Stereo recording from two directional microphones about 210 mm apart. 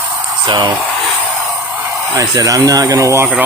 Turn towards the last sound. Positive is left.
turn(degrees=-10)  # may be behind; listen again after turning